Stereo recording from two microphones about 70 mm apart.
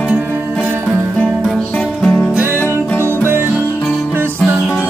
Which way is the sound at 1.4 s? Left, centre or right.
Centre.